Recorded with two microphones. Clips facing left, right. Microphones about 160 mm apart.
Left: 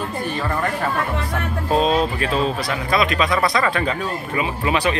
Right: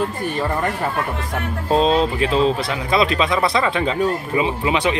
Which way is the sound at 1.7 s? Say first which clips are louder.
Right 2 dB; 25° right (ahead or behind).